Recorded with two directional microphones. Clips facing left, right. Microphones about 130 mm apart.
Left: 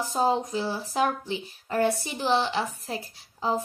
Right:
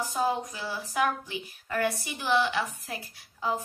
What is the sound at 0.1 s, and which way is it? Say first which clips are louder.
Speech: left 7 dB; 30° left (ahead or behind).